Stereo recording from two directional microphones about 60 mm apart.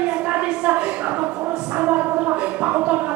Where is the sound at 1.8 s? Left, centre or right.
Right.